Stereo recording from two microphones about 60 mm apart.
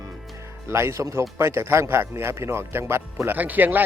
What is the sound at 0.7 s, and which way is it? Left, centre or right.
Speech, right.